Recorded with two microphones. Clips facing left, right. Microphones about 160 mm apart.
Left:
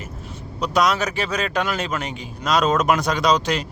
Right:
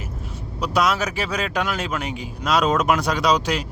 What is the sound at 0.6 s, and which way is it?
Speech, 5° right (ahead or behind).